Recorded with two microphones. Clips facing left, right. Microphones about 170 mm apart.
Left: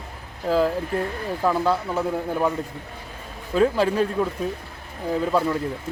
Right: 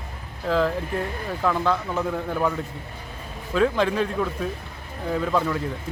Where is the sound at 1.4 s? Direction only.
10° left (ahead or behind).